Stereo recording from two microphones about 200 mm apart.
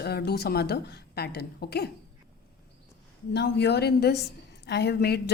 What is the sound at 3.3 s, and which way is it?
A woman's voice, 55° left (ahead or behind).